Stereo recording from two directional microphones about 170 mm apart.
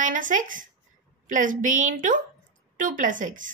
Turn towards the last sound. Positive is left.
turn(degrees=-50)  # may be behind; listen again after turning